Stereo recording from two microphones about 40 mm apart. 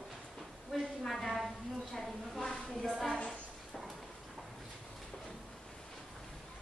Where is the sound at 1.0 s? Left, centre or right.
Centre.